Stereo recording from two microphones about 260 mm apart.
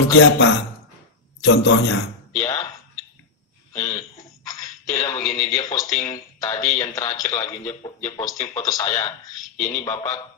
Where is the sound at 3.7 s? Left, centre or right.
Centre.